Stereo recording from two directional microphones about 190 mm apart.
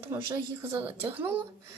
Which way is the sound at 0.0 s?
10° right (ahead or behind).